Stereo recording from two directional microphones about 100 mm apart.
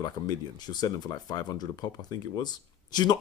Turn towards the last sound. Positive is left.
turn(degrees=45)  # may be behind; listen again after turning